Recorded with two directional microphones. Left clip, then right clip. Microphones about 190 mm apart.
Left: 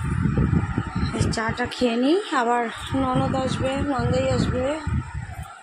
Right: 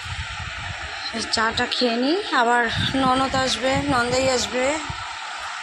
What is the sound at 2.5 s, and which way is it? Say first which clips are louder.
Speech: right 4 dB; 5° left (ahead or behind).